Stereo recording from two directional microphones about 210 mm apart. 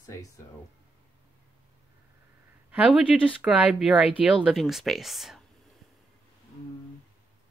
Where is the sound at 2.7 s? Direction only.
5° right (ahead or behind).